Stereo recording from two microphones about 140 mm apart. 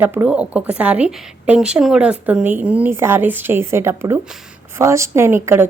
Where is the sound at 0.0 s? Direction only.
15° right (ahead or behind).